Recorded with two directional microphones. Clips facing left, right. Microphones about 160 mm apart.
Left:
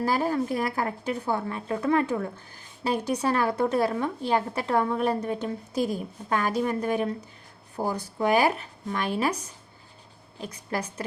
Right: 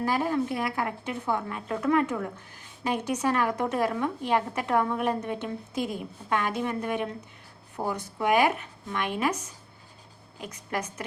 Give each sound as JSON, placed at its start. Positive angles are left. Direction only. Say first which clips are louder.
{"t": 0.0, "sound": "a woman's voice", "louder": "left 1 dB", "side_deg": 35}